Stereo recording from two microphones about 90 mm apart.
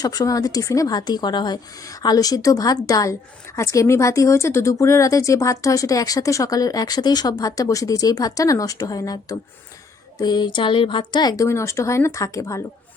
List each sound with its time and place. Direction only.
0.0 s a woman's voice: 45° left (ahead or behind)
1.8 s a woman's voice: 45° left (ahead or behind)
11.4 s a woman's voice: 30° left (ahead or behind)